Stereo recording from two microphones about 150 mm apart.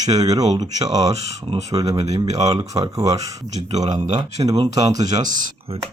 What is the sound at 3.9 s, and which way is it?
Speech, 50° right (ahead or behind).